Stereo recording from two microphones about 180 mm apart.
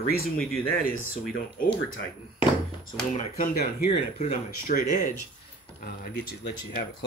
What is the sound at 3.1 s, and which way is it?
Speech, 50° left (ahead or behind).